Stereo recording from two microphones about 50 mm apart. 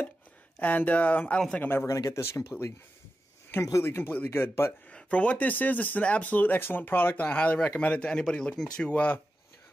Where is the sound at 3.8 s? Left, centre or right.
Left.